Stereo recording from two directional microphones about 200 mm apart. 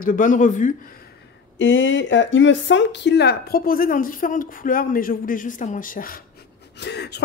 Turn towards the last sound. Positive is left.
turn(degrees=55)  # may be behind; listen again after turning